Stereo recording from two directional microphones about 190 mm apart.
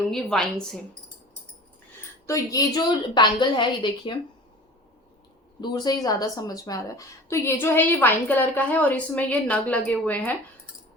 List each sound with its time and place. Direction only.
0.1 s a woman's voice: centre (ahead or behind)
2.2 s a woman's voice: 15° left (ahead or behind)
5.5 s a woman's voice: 20° left (ahead or behind)